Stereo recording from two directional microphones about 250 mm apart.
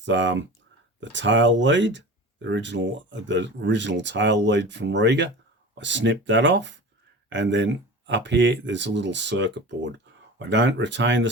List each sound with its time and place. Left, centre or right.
0.0 s speech: right